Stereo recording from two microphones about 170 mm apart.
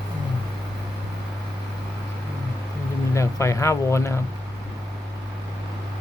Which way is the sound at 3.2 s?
15° left (ahead or behind).